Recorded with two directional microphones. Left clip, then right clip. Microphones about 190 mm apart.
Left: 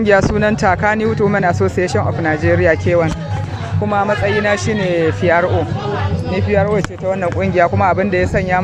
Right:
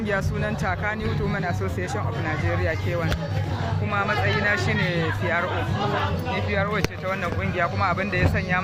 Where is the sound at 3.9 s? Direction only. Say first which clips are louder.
Left 9 dB; 35° left (ahead or behind).